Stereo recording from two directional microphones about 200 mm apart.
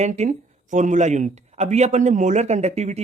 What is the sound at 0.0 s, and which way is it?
Speech, 35° right (ahead or behind).